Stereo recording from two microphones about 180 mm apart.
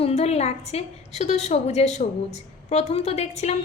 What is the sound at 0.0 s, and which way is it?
A woman's voice, 35° left (ahead or behind).